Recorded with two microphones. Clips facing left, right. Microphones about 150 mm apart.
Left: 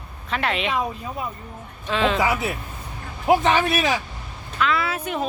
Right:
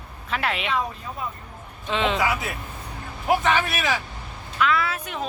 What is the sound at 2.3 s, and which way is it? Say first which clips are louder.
A man's voice: left 3 dB; 25° left (ahead or behind).